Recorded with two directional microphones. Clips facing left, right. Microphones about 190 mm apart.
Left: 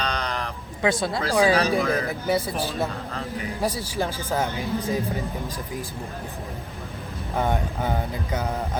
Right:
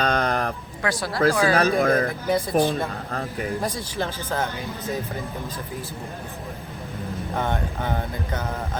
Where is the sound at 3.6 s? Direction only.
10° left (ahead or behind).